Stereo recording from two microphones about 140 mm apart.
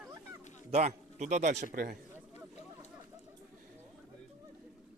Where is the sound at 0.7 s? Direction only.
55° right (ahead or behind); by 2.0 s 90° right.